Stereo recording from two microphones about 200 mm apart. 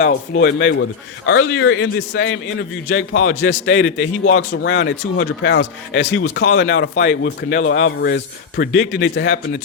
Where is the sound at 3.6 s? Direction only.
70° left (ahead or behind).